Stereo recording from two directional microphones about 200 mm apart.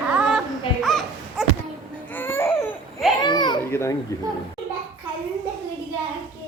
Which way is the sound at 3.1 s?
20° left (ahead or behind).